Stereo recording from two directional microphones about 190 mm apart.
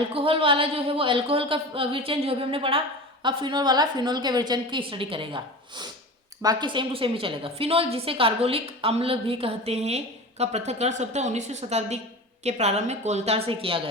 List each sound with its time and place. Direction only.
0.1 s a woman's voice: 30° right (ahead or behind)